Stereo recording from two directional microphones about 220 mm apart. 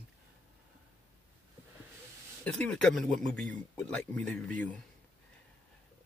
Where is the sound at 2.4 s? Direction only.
5° left (ahead or behind).